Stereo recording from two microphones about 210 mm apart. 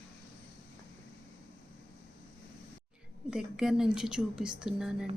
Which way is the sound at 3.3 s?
5° right (ahead or behind).